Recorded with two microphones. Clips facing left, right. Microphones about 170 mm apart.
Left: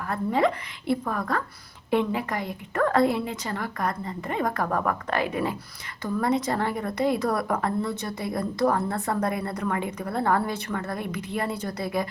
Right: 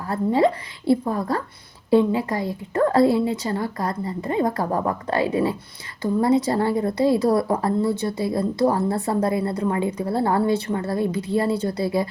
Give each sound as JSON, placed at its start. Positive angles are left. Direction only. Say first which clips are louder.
{"t": 0.0, "sound": "a woman's voice", "louder": "right 4 dB", "side_deg": -30}